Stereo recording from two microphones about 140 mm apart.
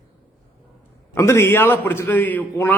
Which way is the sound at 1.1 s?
20° left (ahead or behind).